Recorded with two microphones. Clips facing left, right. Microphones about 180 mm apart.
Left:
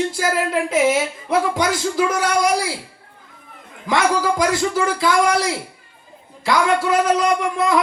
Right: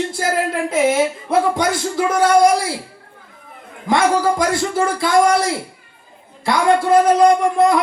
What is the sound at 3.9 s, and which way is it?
A man's voice, 50° right (ahead or behind).